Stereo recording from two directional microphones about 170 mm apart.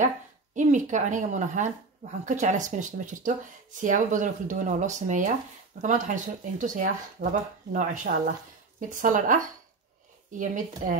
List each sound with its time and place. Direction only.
0.6 s speech: 45° right (ahead or behind)